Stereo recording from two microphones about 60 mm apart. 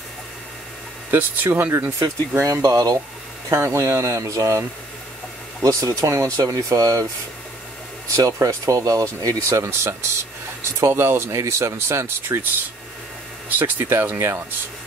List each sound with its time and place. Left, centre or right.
1.1 s speech: right
2.0 s speech: right
3.5 s speech: right
8.2 s speech: right
9.5 s speech: right
11.2 s speech: right
13.5 s speech: right